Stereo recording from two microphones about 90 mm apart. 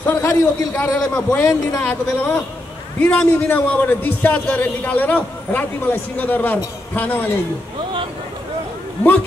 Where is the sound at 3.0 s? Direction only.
15° left (ahead or behind).